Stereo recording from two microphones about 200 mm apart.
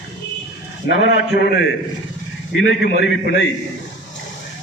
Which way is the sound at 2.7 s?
65° left (ahead or behind).